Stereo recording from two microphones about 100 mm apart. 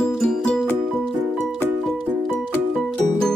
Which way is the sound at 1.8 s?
5° left (ahead or behind).